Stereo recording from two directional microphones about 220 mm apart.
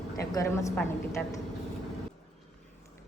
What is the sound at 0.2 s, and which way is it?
A woman's voice, 15° left (ahead or behind).